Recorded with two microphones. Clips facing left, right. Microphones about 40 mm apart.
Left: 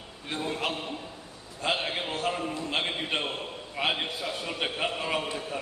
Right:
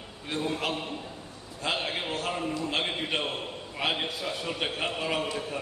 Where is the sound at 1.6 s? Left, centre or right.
Centre.